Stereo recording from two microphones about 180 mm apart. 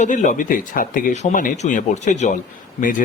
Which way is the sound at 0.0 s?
45° left (ahead or behind).